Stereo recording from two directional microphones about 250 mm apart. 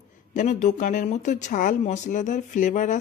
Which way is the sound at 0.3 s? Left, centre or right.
Left.